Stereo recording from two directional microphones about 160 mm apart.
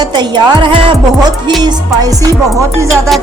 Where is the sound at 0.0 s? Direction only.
25° right (ahead or behind).